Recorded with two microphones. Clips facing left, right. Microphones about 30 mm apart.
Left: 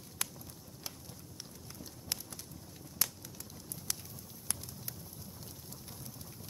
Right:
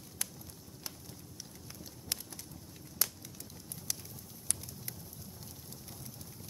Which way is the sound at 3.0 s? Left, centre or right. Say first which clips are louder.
Even; centre.